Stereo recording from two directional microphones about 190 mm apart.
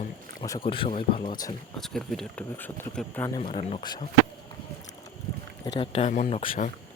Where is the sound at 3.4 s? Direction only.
30° left (ahead or behind).